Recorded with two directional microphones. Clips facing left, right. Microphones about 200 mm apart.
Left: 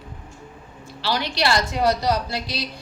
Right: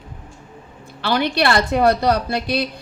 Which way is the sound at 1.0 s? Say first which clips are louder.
Right 5 dB; 55° right (ahead or behind).